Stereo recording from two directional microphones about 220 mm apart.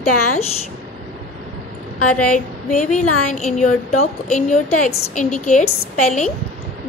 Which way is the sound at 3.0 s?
90° left.